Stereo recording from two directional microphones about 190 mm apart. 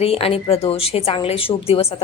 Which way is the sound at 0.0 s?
30° left (ahead or behind).